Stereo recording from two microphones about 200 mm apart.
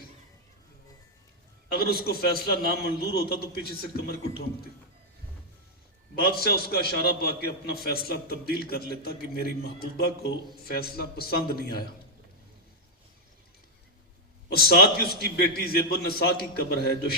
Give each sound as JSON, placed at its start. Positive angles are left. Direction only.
{"t": 1.9, "sound": "a man's voice", "side_deg": 50}
{"t": 6.1, "sound": "a man's voice", "side_deg": 50}
{"t": 14.5, "sound": "a man's voice", "side_deg": 50}